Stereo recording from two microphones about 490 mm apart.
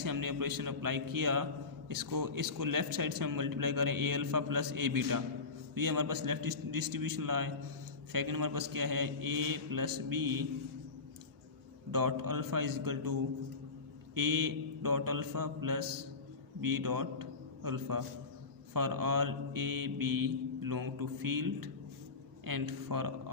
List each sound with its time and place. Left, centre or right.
0.0 s speech: right
11.9 s speech: right
14.2 s a man's voice: right